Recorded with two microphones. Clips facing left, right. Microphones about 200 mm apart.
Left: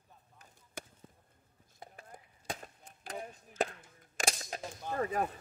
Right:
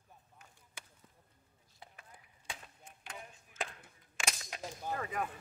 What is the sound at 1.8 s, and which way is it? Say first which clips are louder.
Chop: left 6 dB; 45° left (ahead or behind).